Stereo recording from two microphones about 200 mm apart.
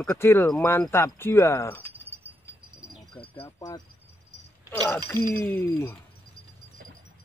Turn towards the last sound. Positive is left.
turn(degrees=10)  # may be behind; listen again after turning